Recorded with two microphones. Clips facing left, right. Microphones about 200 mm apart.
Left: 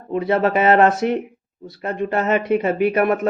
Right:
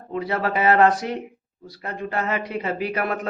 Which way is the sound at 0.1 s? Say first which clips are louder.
Left 6 dB; 25° left (ahead or behind).